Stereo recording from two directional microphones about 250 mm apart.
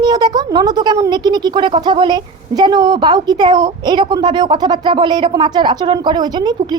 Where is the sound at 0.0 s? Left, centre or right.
Centre.